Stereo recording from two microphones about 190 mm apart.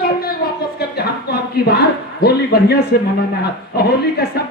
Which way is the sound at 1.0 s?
55° left (ahead or behind).